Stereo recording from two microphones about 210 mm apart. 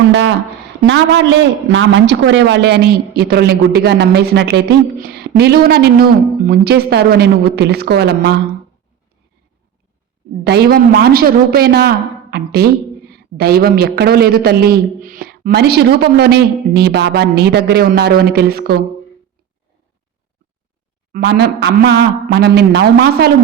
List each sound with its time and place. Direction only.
0.1 s a sound: 60° right (ahead or behind)
0.9 s a man's voice: 60° right (ahead or behind)
10.4 s a man's voice: 50° right (ahead or behind)
21.1 s a man's voice: 50° right (ahead or behind)